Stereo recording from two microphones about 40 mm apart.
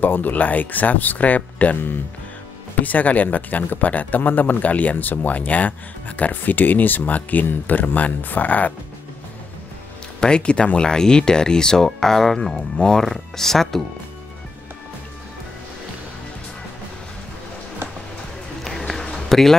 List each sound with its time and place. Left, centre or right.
0.0 s speech: left
2.8 s speech: left
6.4 s speech: left
10.2 s speech: left; by 13.8 s centre
18.6 s a sound: centre